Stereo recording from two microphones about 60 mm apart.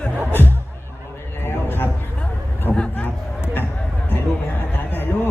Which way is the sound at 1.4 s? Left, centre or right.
Left.